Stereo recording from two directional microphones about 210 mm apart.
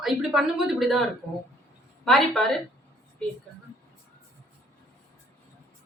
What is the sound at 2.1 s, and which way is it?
Speech, centre (ahead or behind).